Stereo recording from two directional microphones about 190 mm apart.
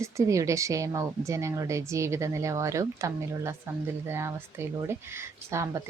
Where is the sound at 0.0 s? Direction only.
15° right (ahead or behind).